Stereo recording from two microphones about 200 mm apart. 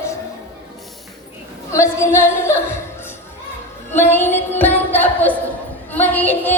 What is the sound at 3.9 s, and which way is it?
Music, 10° left (ahead or behind).